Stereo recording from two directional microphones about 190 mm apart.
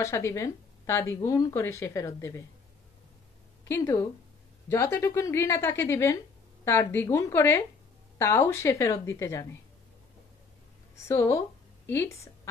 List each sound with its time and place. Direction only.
0.0 s speech: 15° left (ahead or behind)
3.6 s speech: 15° left (ahead or behind)
11.1 s speech: 15° left (ahead or behind)